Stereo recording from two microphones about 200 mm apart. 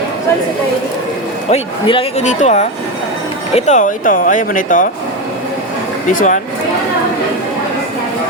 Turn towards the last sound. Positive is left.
turn(degrees=40)  # may be behind; listen again after turning